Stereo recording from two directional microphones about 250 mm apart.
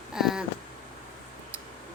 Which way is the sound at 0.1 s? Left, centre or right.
Centre.